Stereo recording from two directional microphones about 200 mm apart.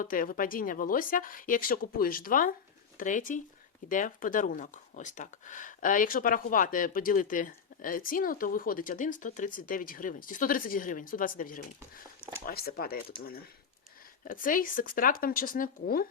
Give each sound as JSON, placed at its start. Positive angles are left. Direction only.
{"t": 0.0, "sound": "speech", "side_deg": 45}
{"t": 14.3, "sound": "speech", "side_deg": 45}